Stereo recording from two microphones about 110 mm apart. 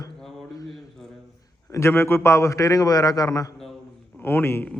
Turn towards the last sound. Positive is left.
turn(degrees=20)  # may be behind; listen again after turning